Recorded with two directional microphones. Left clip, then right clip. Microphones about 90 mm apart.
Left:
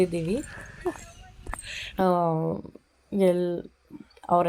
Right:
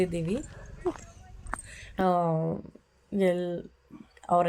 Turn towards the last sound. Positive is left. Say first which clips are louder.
# left 2 dB
turn(degrees=40)  # may be behind; listen again after turning